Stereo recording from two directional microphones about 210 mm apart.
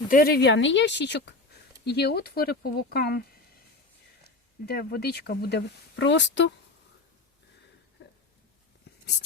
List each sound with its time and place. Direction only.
0.1 s speech: 45° left (ahead or behind)
4.6 s speech: 50° left (ahead or behind)